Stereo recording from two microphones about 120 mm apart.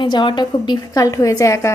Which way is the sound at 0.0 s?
40° left (ahead or behind).